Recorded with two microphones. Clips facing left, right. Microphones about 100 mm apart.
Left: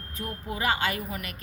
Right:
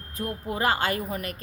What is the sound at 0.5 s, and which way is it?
Speech, 45° right (ahead or behind).